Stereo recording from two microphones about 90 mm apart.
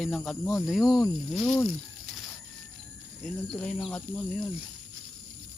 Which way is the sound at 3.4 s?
5° left (ahead or behind).